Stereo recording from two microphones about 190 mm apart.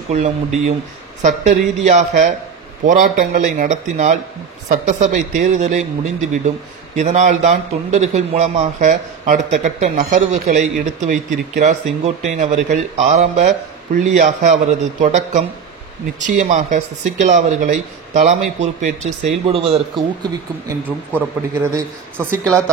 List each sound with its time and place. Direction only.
0.1 s a man's voice: 35° right (ahead or behind)
22.2 s speech: 10° right (ahead or behind)